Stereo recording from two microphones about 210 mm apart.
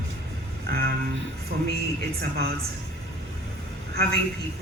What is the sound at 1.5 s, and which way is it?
Speech, 45° right (ahead or behind).